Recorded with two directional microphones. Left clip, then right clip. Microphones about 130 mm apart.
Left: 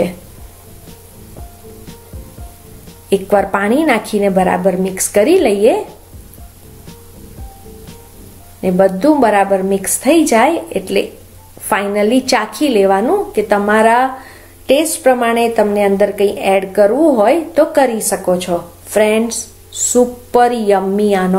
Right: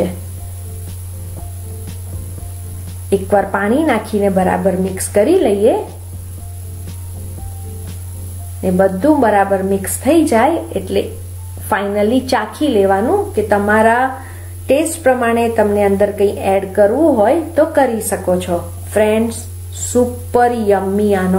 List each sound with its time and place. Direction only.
3.1 s speech: 20° left (ahead or behind)
8.5 s a woman's voice: 20° left (ahead or behind)
15.3 s a woman's voice: 25° left (ahead or behind)